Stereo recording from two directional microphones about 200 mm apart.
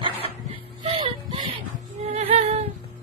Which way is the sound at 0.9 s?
25° right (ahead or behind).